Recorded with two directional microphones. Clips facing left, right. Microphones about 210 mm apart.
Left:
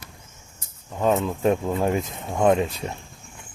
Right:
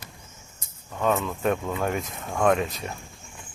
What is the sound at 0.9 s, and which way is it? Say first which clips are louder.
Speech: left 3 dB; 25° left (ahead or behind).